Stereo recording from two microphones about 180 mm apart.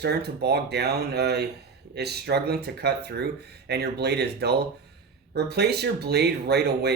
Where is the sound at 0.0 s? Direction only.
65° right (ahead or behind).